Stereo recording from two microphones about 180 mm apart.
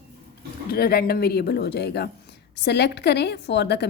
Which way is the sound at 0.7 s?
60° left (ahead or behind).